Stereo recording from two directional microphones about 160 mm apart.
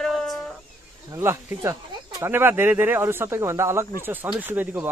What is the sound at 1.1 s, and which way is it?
Speech, 15° right (ahead or behind).